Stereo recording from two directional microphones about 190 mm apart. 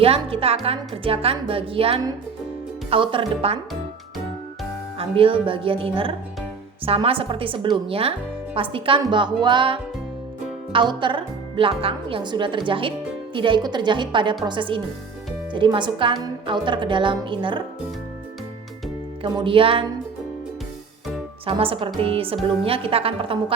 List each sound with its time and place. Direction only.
0.0 s a woman's voice: 30° right (ahead or behind)
4.9 s a woman's voice: 30° right (ahead or behind)
19.2 s a woman's voice: 25° right (ahead or behind)
21.4 s a woman's voice: 30° right (ahead or behind)